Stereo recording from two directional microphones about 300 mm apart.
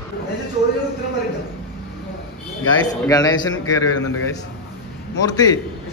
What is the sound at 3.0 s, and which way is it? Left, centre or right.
Speech, centre.